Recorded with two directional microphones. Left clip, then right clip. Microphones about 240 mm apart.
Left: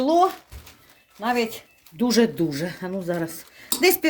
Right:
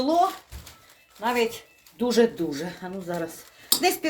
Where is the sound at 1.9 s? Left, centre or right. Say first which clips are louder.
Left 1 dB; left.